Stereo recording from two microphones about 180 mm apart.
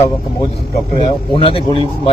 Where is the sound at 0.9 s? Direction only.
30° left (ahead or behind).